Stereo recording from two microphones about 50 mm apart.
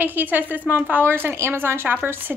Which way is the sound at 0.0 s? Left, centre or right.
Right.